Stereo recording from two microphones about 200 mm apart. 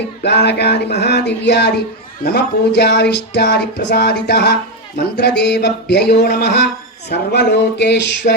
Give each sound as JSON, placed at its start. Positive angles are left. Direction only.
{"t": 0.2, "sound": "speech", "side_deg": 55}